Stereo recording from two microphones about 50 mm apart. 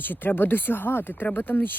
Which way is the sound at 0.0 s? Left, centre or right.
Left.